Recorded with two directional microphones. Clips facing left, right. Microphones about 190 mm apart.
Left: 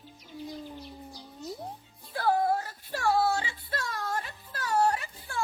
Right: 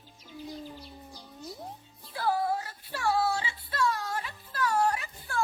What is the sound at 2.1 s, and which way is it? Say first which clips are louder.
Child singing: left 3 dB; 50° left (ahead or behind).